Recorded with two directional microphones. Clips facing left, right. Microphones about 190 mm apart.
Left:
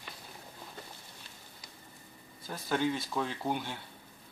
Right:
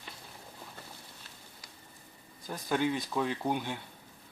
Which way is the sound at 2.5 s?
15° right (ahead or behind).